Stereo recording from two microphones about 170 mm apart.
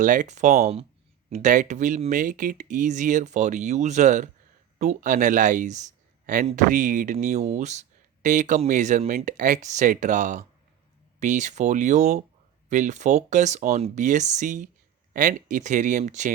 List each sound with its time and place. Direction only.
0.0 s speech: 50° right (ahead or behind)